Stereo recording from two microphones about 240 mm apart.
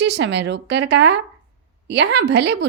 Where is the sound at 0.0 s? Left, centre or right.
Right.